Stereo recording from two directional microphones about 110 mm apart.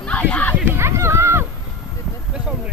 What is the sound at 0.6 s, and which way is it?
Run, 25° right (ahead or behind).